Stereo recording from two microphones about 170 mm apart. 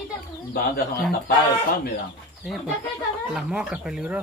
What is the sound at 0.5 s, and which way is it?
Speech, 65° left (ahead or behind).